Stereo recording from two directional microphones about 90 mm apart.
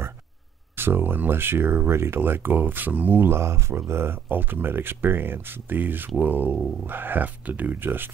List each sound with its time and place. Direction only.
0.7 s speech: 25° right (ahead or behind)